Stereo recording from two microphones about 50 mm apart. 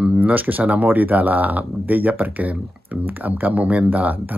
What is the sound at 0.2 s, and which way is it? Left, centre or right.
Speech, right.